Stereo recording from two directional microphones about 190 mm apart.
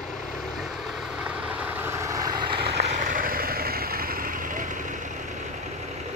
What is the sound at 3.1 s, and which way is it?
Vehicle, 45° right (ahead or behind).